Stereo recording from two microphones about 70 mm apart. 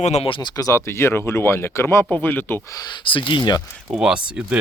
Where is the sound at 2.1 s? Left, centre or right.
Left.